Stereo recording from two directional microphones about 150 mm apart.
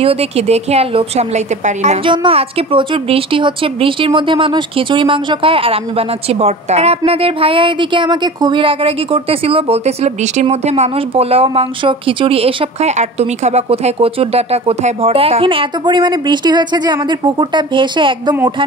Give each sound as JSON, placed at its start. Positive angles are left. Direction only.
{"t": 0.0, "sound": "a woman's voice", "side_deg": -40}
{"t": 2.0, "sound": "a woman's voice", "side_deg": -40}